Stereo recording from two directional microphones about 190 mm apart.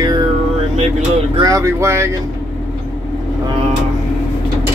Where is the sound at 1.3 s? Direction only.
20° right (ahead or behind).